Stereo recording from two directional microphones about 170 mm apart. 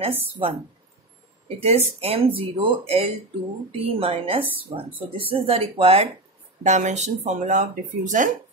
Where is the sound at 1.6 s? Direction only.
40° right (ahead or behind).